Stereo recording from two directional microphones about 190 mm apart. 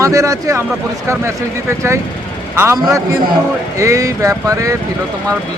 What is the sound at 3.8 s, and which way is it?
Speech, 15° right (ahead or behind).